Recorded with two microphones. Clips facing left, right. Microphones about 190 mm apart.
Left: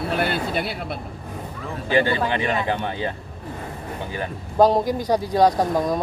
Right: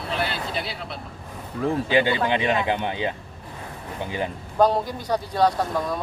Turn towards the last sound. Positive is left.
turn(degrees=40)  # may be behind; listen again after turning